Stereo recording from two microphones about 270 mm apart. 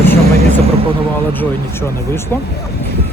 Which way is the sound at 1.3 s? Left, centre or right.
Centre.